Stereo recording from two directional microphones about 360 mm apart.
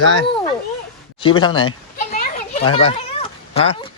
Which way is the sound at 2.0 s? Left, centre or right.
Left.